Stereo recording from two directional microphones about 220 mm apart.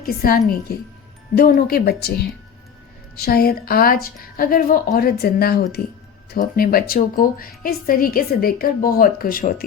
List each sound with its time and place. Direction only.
0.0 s a woman's voice: 45° left (ahead or behind)